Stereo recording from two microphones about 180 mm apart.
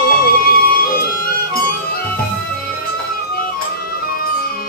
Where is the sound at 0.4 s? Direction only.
55° left (ahead or behind).